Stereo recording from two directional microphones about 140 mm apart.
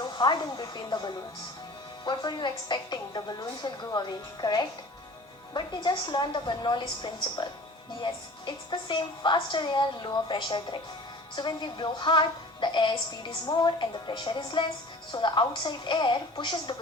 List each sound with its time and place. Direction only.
0.0 s a woman's voice: 35° left (ahead or behind)